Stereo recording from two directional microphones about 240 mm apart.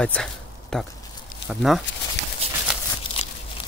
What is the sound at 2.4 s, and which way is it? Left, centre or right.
Horse, right.